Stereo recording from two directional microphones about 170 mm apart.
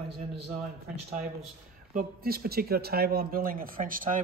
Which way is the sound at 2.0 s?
60° right (ahead or behind).